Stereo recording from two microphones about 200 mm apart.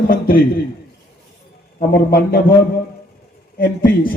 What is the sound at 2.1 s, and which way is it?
Speech, 50° left (ahead or behind).